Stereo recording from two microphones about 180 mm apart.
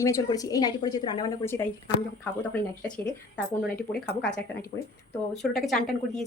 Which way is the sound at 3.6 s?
60° left (ahead or behind).